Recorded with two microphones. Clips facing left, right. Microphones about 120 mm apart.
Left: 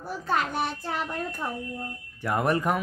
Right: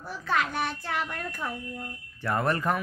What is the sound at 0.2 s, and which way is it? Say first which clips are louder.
A child's voice: left 1 dB; 35° left (ahead or behind).